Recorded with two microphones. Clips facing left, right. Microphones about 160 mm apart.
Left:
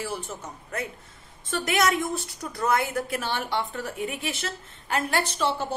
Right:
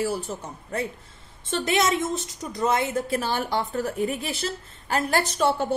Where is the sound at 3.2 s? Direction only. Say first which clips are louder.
Right 3 dB; 40° right (ahead or behind).